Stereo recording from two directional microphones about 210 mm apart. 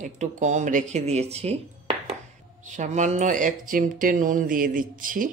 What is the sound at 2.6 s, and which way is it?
Speech, 35° right (ahead or behind).